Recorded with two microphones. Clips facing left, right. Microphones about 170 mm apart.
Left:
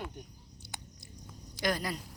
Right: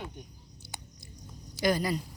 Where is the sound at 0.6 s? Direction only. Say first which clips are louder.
Right 1 dB; centre (ahead or behind).